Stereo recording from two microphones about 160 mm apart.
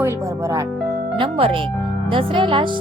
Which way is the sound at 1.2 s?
35° right (ahead or behind).